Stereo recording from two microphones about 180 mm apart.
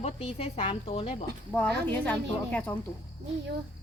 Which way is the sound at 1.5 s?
5° left (ahead or behind).